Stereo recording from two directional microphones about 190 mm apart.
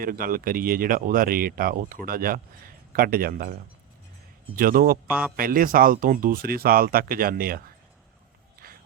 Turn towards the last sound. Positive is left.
turn(degrees=-50)  # may be behind; listen again after turning